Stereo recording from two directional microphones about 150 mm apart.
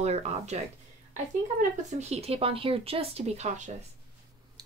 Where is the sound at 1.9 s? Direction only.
45° right (ahead or behind).